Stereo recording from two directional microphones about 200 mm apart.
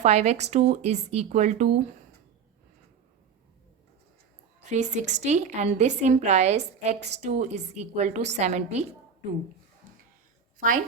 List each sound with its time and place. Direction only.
0.0 s a woman's voice: 35° right (ahead or behind)
4.7 s a woman's voice: 35° right (ahead or behind)